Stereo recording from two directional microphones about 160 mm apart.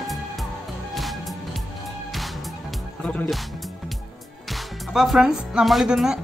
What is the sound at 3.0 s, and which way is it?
Speech, 5° left (ahead or behind).